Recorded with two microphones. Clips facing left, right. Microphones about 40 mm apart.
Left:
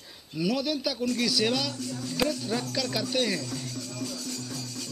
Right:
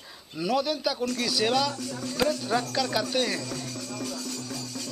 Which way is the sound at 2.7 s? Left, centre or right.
Centre.